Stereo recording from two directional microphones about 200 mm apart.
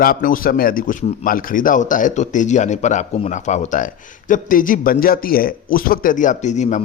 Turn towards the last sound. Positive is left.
turn(degrees=35)  # may be behind; listen again after turning